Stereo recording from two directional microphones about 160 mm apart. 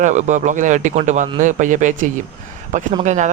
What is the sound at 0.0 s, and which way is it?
Speech, 50° right (ahead or behind).